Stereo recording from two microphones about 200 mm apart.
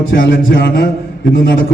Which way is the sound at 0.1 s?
55° left (ahead or behind).